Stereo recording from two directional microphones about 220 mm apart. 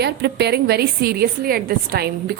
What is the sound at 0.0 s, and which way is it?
A woman's voice, 50° right (ahead or behind).